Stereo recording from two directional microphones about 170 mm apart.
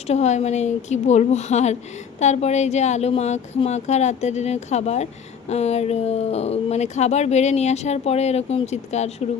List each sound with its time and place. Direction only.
0.1 s speech: 40° left (ahead or behind)